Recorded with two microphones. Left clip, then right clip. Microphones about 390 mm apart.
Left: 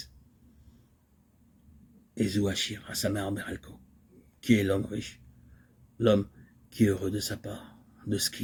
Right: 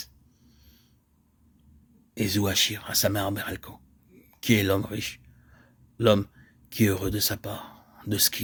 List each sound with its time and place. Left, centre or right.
2.1 s speech: right
2.6 s speech: right
3.0 s speech: right